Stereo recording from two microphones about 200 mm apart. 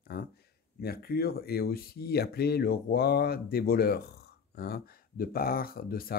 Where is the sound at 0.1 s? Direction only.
55° left (ahead or behind).